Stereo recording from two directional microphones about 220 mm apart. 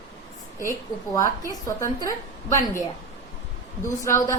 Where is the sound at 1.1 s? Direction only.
15° left (ahead or behind).